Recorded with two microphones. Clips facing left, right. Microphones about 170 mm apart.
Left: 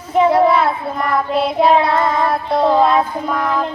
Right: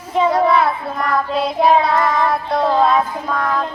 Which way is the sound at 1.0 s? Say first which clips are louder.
Left 2 dB; 5° left (ahead or behind).